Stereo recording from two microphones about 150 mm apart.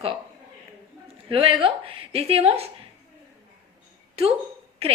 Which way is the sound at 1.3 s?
35° right (ahead or behind).